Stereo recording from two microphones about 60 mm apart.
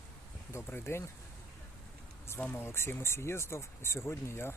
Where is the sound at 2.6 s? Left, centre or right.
Left.